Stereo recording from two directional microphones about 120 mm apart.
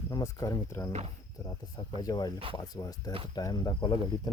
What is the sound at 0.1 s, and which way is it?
Speech, 30° left (ahead or behind).